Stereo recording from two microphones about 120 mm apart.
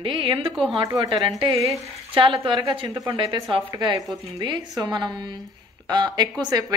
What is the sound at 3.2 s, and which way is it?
A woman's voice, 45° right (ahead or behind).